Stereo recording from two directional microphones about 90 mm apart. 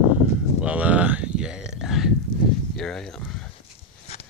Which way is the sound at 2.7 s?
5° left (ahead or behind).